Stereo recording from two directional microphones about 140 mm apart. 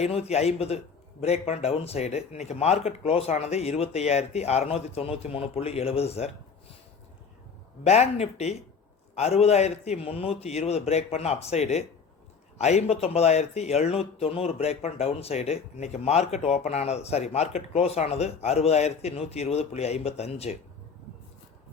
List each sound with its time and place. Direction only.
0.0 s speech: 50° left (ahead or behind)
7.9 s speech: 50° left (ahead or behind)